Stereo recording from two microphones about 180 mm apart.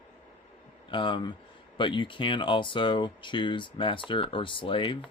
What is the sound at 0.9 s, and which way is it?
Speech, 25° left (ahead or behind).